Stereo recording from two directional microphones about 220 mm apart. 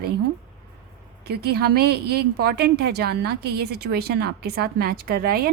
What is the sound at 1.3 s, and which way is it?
Speech, 45° right (ahead or behind).